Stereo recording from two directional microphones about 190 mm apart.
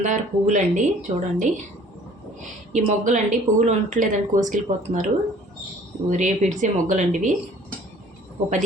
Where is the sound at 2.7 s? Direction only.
40° right (ahead or behind).